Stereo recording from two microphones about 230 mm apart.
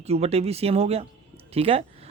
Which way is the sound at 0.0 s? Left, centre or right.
Right.